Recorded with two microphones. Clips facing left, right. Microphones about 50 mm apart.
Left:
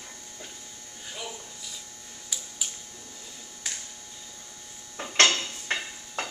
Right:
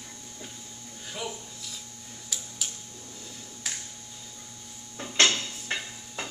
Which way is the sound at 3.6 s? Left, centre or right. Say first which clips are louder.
Even; centre.